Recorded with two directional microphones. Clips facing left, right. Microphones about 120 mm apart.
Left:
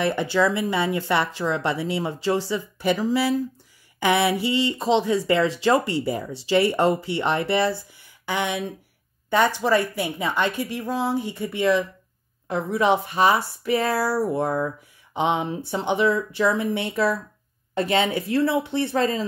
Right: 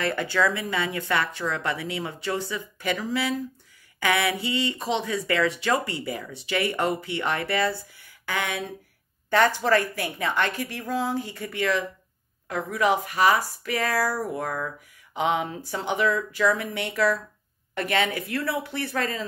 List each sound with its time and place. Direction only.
0.0 s a woman's voice: 20° left (ahead or behind)